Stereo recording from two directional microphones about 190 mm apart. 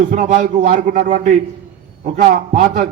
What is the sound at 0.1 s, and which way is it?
A man's voice, 40° right (ahead or behind).